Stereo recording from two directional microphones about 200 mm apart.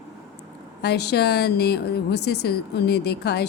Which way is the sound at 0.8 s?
55° left (ahead or behind).